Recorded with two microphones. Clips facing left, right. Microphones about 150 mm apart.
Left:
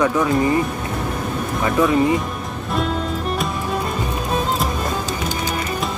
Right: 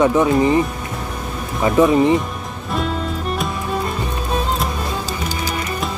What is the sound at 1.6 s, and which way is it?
Speech, 25° right (ahead or behind).